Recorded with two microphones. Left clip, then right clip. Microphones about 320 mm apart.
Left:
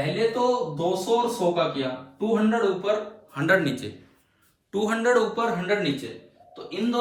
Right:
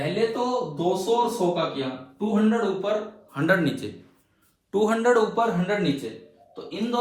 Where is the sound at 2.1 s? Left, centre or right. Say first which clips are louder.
Even; centre.